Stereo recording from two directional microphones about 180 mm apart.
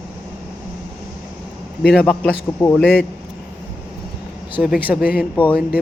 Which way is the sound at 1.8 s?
5° left (ahead or behind).